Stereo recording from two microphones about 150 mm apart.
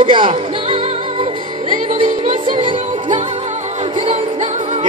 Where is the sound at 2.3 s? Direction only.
60° right (ahead or behind).